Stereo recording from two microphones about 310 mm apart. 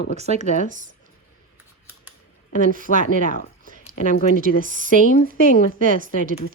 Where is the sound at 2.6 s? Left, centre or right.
Right.